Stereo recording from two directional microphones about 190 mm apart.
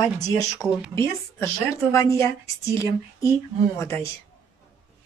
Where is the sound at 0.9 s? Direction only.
15° left (ahead or behind).